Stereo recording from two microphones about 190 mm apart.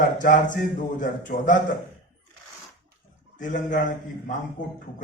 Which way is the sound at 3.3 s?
45° left (ahead or behind).